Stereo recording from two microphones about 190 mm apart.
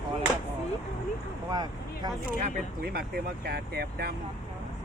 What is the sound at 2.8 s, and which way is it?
Speech, 55° right (ahead or behind).